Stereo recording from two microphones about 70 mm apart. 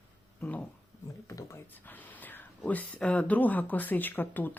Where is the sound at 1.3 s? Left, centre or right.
Left.